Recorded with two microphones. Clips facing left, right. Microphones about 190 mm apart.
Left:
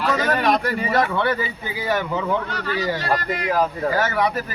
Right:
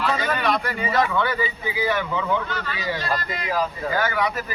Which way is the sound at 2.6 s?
65° left (ahead or behind).